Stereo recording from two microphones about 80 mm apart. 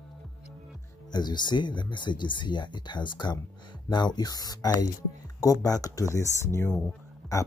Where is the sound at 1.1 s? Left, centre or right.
Left.